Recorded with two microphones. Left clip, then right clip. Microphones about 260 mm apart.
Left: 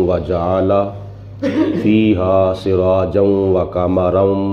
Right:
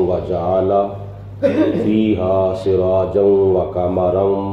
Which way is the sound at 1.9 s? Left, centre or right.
Left.